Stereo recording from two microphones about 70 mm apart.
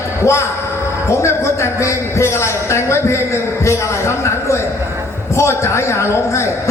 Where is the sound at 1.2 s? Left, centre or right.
Left.